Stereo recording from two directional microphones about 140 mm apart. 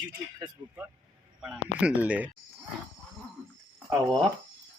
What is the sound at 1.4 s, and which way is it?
Speech, 10° right (ahead or behind).